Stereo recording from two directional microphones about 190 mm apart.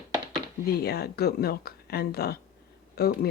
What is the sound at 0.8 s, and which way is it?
Speech, 55° left (ahead or behind).